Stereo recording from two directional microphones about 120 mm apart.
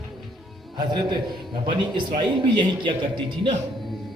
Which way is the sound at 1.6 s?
40° right (ahead or behind).